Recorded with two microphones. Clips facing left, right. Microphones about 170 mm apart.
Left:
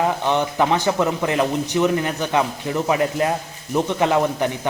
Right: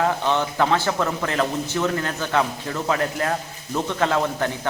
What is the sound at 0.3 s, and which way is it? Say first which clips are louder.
Speech: left 2 dB; 15° left (ahead or behind).